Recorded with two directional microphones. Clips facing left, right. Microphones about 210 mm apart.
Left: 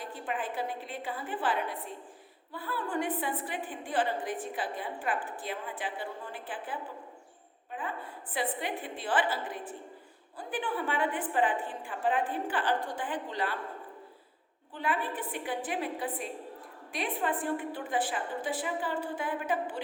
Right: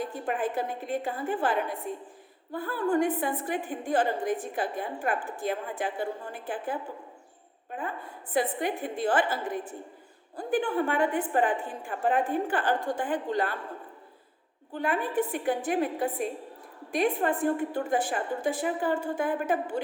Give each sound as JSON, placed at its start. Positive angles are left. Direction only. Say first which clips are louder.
{"t": 0.0, "sound": "a woman's voice", "louder": "right 6 dB", "side_deg": -45}
{"t": 14.7, "sound": "a woman's voice", "louder": "right 4 dB", "side_deg": -45}